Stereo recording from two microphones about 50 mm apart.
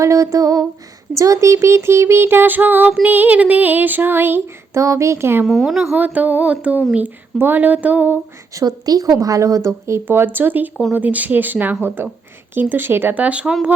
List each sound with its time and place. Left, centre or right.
0.0 s a sound: right
3.1 s female singing: right
4.7 s a woman's voice: right
5.5 s speech: centre
5.9 s female singing: right
7.3 s female singing: right
9.1 s a woman's voice: right
10.1 s female singing: right
12.5 s speech: right
13.1 s speech: right